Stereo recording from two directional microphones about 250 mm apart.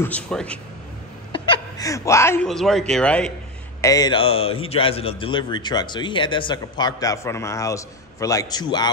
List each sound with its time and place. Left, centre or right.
0.0 s speech: centre
1.3 s speech: centre
3.8 s a man's voice: centre